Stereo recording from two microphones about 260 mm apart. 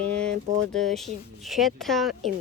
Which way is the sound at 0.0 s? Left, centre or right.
Centre.